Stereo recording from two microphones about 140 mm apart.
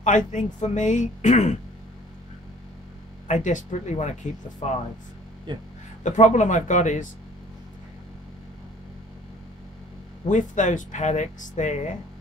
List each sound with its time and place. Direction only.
0.0 s speech: 60° left (ahead or behind)
3.3 s speech: 60° left (ahead or behind)
5.5 s speech: 35° right (ahead or behind)
6.0 s speech: 60° left (ahead or behind)
10.2 s speech: 65° left (ahead or behind)